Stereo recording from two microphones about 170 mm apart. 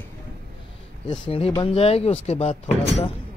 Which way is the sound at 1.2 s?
35° left (ahead or behind).